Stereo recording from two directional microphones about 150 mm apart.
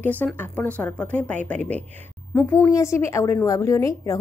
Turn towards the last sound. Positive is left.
turn(degrees=20)  # may be behind; listen again after turning